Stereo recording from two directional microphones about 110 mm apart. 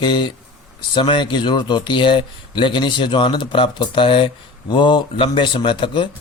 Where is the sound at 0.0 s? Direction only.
45° left (ahead or behind).